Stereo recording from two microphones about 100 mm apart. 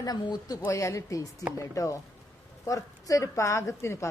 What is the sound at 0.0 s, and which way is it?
A woman's voice, 40° left (ahead or behind).